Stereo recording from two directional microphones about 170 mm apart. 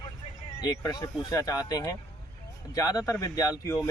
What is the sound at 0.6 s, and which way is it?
Speech, 25° left (ahead or behind).